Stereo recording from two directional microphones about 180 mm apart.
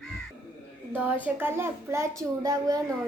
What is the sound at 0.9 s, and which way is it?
A child's voice, 10° right (ahead or behind).